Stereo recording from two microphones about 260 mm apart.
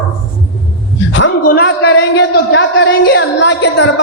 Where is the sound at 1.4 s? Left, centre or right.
Left.